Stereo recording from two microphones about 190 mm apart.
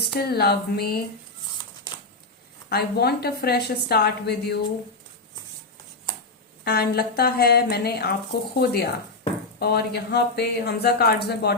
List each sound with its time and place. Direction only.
0.1 s speech: 55° left (ahead or behind)
2.6 s speech: 55° left (ahead or behind)
6.7 s speech: 55° left (ahead or behind)